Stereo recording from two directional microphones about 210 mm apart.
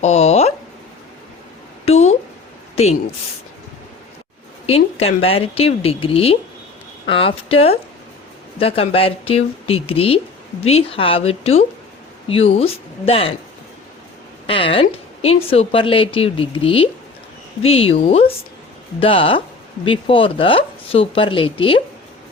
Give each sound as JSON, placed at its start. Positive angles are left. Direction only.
{"t": 0.0, "sound": "a woman's voice", "side_deg": 30}
{"t": 1.8, "sound": "a sound", "side_deg": 30}
{"t": 4.6, "sound": "a woman's voice", "side_deg": 30}
{"t": 14.4, "sound": "a woman's voice", "side_deg": 25}